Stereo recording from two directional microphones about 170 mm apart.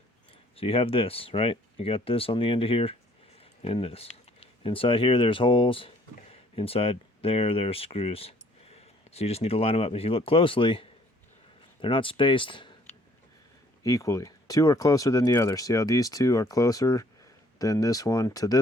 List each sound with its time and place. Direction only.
0.5 s speech: 35° left (ahead or behind)
13.8 s speech: 20° left (ahead or behind)